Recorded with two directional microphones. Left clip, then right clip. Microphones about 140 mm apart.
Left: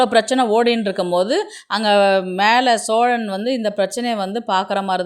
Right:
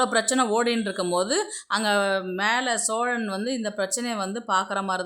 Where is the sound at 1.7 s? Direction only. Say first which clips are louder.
Left 9 dB; 30° left (ahead or behind).